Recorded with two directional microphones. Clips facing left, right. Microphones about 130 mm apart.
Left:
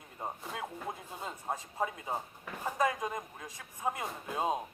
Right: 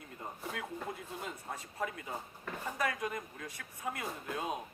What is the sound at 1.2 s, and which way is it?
Speech, 25° left (ahead or behind).